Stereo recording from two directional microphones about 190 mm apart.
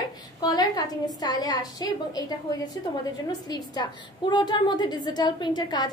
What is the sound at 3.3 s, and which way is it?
A woman's voice, 20° left (ahead or behind).